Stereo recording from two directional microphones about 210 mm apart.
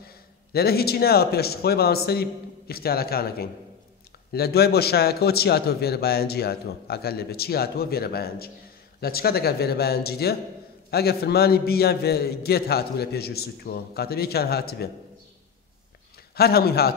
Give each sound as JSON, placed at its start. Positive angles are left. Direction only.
{"t": 0.0, "sound": "a man's voice", "side_deg": 45}
{"t": 16.3, "sound": "a man's voice", "side_deg": 45}